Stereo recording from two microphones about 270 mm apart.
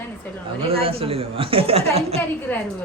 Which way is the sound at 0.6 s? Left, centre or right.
Right.